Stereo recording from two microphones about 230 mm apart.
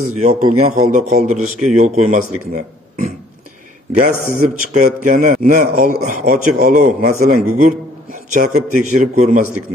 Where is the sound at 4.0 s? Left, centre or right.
Right.